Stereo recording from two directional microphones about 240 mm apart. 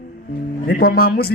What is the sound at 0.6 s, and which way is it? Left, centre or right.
Speech, left.